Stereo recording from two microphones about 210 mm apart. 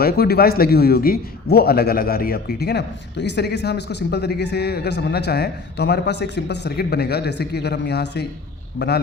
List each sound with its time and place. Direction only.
0.0 s a man's voice: 50° left (ahead or behind)
8.8 s a man's voice: 30° left (ahead or behind)